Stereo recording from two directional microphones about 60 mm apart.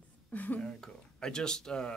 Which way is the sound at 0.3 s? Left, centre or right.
Left.